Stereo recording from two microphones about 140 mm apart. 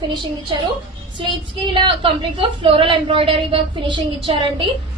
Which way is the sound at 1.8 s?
40° right (ahead or behind).